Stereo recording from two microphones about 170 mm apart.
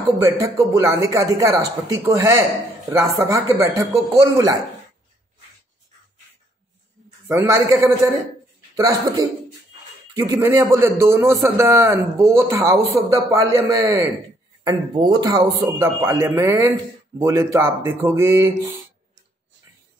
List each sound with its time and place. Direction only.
0.2 s a man's voice: 15° right (ahead or behind)
7.2 s a man's voice: 15° right (ahead or behind)